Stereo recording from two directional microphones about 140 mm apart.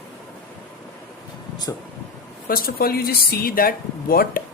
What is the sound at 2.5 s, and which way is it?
Speech, 90° left.